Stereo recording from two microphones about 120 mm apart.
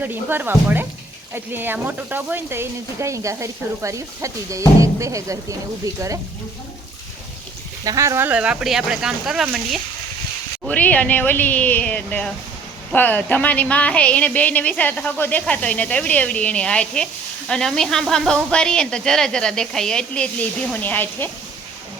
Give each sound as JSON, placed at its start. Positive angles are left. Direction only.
{"t": 0.0, "sound": "speech", "side_deg": -15}
{"t": 7.9, "sound": "speech", "side_deg": -25}
{"t": 10.7, "sound": "a woman's voice", "side_deg": 10}